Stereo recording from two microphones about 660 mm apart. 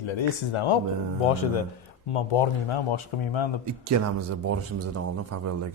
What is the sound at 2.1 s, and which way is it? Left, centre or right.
Speech, left.